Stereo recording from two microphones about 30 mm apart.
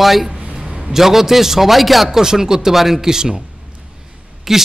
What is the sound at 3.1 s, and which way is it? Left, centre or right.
Speech, right.